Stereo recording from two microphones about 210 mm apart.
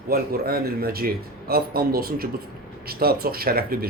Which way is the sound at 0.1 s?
45° right (ahead or behind).